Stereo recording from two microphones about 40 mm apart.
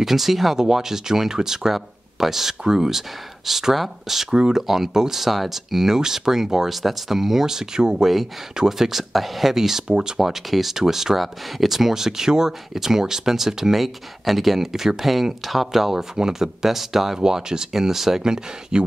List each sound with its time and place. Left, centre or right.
0.0 s speech: centre
17.2 s speech: centre